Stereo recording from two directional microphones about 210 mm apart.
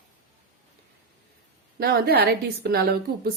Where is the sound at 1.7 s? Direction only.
50° right (ahead or behind).